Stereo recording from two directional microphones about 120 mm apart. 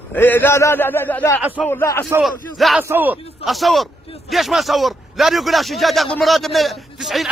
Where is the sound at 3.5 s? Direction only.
Centre (ahead or behind).